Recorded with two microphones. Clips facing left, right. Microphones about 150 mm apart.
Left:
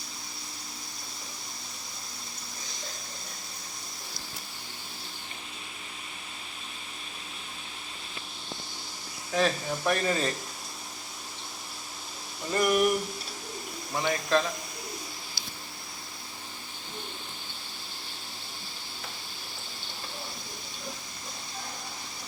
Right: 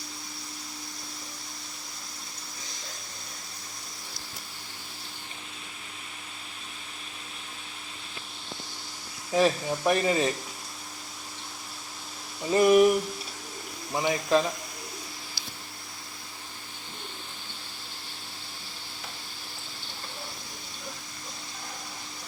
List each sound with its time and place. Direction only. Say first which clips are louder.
9.3 s speech: right 3 dB; 15° right (ahead or behind)
12.5 s a sound: right 6 dB; 20° right (ahead or behind)
13.9 s speech: right 2 dB; 15° right (ahead or behind)